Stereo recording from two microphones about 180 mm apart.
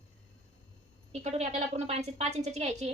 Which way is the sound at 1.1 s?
40° right (ahead or behind).